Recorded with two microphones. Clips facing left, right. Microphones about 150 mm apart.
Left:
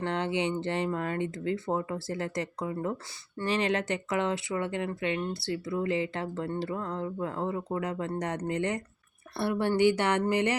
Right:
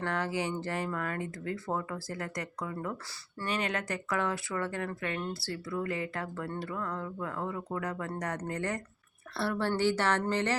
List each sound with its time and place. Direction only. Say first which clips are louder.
0.0 s speech: left 3 dB; 25° left (ahead or behind)